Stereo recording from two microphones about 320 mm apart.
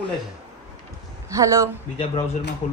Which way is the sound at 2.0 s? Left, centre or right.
Left.